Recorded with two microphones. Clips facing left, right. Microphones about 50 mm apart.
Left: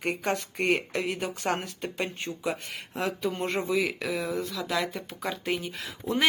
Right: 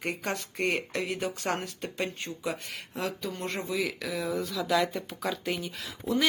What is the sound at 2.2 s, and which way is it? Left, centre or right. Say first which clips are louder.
Speech: left 2 dB; left.